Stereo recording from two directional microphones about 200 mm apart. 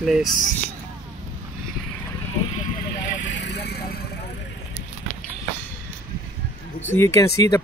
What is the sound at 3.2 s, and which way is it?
Vehicle, 60° left (ahead or behind).